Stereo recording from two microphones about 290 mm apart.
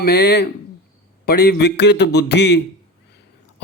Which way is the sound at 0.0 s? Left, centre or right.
Left.